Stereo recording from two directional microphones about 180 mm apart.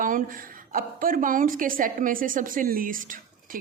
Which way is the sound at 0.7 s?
50° right (ahead or behind).